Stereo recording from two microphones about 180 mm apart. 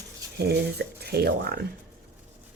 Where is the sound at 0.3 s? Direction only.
65° right (ahead or behind).